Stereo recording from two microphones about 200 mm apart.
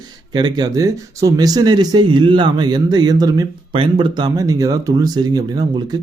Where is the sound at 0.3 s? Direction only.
20° right (ahead or behind).